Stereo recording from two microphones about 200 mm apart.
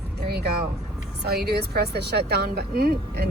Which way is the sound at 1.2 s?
50° right (ahead or behind).